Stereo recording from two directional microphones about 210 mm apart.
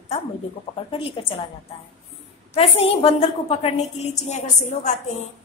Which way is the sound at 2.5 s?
30° left (ahead or behind).